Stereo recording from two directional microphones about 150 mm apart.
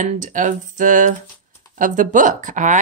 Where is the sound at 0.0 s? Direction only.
60° right (ahead or behind).